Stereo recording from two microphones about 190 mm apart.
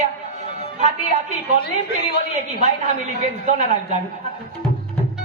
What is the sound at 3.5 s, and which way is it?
Speech, 40° right (ahead or behind).